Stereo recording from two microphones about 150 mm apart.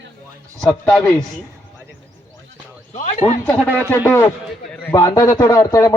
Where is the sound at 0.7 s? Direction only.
5° left (ahead or behind).